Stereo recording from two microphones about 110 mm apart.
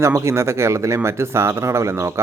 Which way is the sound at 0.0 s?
25° right (ahead or behind).